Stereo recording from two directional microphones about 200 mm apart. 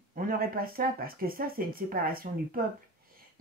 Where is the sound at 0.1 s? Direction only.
45° right (ahead or behind).